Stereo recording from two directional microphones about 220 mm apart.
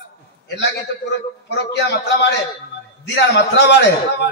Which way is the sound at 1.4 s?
50° left (ahead or behind).